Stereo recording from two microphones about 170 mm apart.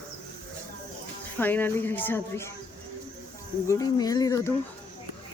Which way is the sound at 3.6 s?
20° left (ahead or behind).